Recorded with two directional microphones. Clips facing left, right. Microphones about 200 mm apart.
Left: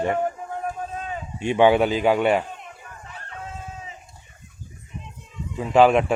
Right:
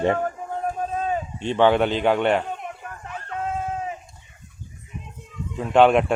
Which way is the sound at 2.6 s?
55° right (ahead or behind).